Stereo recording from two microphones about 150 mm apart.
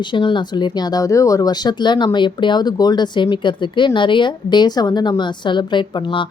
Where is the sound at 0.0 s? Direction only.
30° left (ahead or behind).